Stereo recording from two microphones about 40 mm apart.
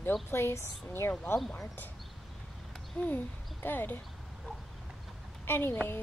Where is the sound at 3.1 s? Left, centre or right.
Left.